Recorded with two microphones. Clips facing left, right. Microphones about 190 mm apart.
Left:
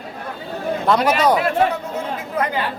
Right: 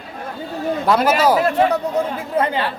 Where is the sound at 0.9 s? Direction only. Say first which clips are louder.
Right 1 dB; 5° right (ahead or behind).